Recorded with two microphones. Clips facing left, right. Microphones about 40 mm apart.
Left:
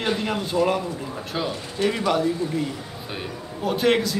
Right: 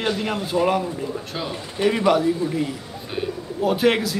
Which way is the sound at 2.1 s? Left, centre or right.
Centre.